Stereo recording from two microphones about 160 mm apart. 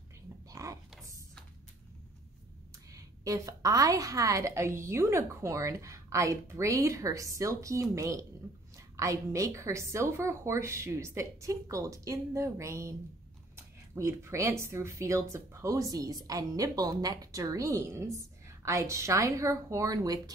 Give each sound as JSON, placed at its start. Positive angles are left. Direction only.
{"t": 0.5, "sound": "a sound", "side_deg": -20}
{"t": 2.9, "sound": "a woman's voice", "side_deg": -20}
{"t": 13.9, "sound": "a woman's voice", "side_deg": -15}